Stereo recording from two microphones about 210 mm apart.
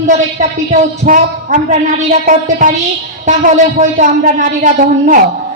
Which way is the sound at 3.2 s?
35° right (ahead or behind).